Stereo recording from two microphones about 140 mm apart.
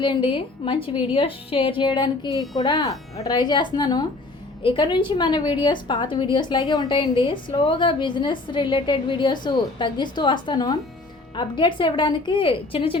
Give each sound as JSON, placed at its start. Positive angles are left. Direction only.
{"t": 0.0, "sound": "a woman's voice", "side_deg": 35}